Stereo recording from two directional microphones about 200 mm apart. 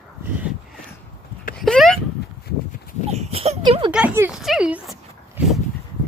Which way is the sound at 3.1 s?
30° right (ahead or behind).